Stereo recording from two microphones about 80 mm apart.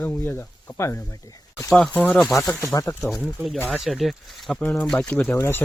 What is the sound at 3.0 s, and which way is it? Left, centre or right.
Speech, centre.